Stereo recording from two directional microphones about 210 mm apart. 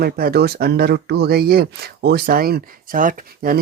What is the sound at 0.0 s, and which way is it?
Speech, 45° right (ahead or behind).